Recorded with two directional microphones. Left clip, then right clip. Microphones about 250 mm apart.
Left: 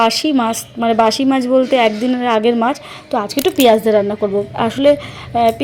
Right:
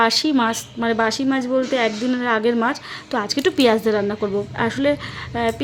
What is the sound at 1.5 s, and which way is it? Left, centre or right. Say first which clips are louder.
A woman's voice: left 8 dB; centre.